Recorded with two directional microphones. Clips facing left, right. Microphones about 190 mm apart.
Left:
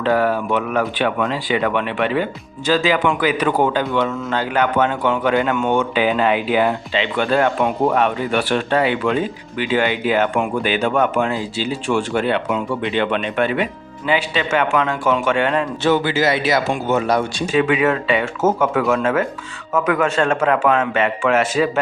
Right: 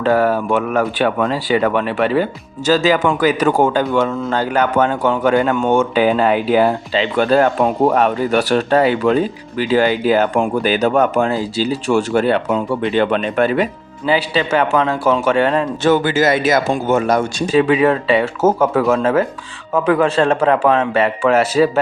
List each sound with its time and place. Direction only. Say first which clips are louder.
0.0 s a man's voice: right 3 dB; 45° right (ahead or behind)